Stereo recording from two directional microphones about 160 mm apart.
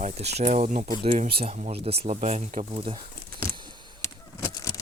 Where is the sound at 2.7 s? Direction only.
30° right (ahead or behind).